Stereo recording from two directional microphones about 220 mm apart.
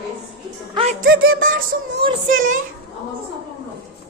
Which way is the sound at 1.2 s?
40° right (ahead or behind).